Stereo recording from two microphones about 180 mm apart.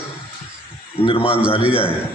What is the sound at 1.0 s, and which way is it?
Speech, 30° left (ahead or behind).